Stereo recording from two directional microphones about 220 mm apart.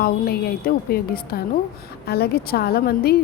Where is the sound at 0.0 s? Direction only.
45° left (ahead or behind).